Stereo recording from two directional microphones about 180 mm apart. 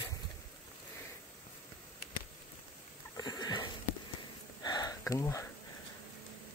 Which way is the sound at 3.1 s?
20° left (ahead or behind).